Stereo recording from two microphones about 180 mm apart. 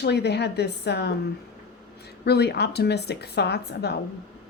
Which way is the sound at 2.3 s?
65° left (ahead or behind).